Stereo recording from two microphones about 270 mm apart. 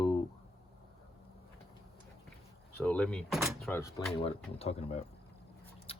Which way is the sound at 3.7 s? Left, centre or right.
Centre.